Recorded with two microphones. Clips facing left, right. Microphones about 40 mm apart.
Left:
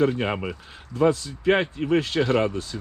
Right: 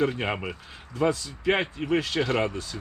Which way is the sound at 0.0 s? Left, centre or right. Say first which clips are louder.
Left 3 dB; centre.